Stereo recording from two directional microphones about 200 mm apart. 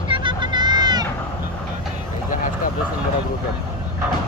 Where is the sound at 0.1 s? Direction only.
25° right (ahead or behind).